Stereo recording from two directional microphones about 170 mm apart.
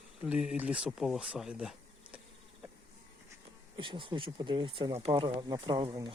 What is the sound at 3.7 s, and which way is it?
Speech, 30° right (ahead or behind).